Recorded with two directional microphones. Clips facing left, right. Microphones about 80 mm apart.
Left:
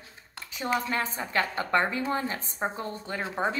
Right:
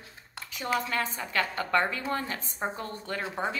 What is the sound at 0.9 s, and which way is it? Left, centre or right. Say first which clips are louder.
Speech: left 1 dB; left.